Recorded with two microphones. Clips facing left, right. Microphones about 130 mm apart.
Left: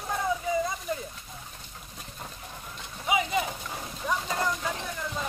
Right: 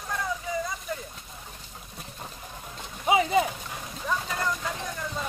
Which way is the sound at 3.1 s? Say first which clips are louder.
Right 5 dB; 30° right (ahead or behind).